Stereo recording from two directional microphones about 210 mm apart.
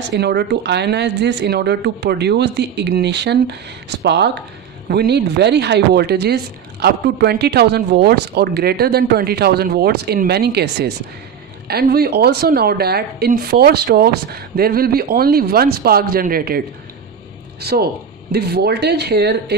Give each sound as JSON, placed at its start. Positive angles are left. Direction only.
{"t": 0.1, "sound": "a woman's voice", "side_deg": -50}